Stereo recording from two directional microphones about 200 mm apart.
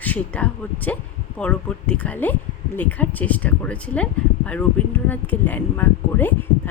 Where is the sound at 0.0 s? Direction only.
5° left (ahead or behind).